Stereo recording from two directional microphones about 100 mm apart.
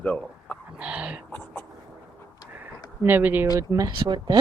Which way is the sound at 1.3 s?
20° left (ahead or behind).